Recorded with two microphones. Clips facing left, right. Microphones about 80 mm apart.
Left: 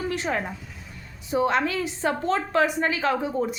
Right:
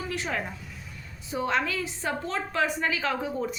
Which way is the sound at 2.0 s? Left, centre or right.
Left.